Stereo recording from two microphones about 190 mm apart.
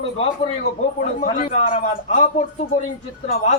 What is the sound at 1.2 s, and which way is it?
A man's voice, 45° left (ahead or behind).